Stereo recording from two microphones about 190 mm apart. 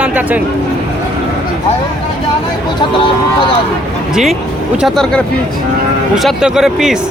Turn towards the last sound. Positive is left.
turn(degrees=0)  # may be behind; listen again after turning